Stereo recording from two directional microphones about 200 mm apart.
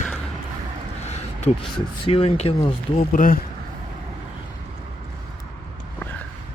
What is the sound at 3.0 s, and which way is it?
Speech, 40° left (ahead or behind).